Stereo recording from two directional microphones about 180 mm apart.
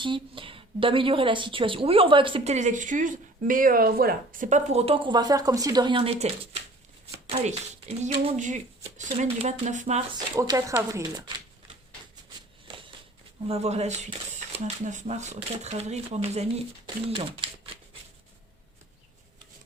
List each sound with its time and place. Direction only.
0.0 s a woman's voice: 30° right (ahead or behind)
10.2 s a woman's voice: 20° right (ahead or behind)
13.5 s speech: 35° right (ahead or behind)